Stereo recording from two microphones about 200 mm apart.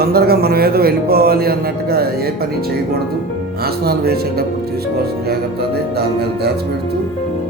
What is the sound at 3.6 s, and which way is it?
Speech, 50° right (ahead or behind).